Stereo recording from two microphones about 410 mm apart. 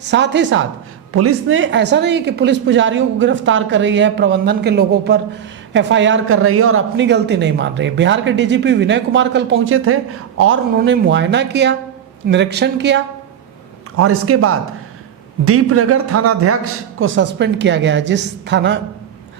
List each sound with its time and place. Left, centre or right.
0.0 s a man's voice: right